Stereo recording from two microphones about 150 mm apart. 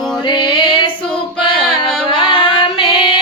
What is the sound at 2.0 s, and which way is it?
Female singing, 35° left (ahead or behind).